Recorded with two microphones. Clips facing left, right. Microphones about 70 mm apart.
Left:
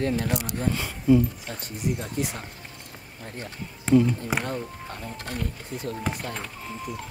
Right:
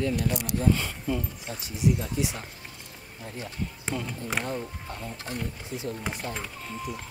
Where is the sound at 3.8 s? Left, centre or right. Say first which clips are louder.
Left 14 dB; centre.